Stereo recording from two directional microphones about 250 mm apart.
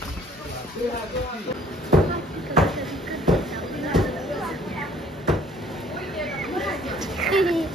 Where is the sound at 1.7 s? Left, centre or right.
Centre.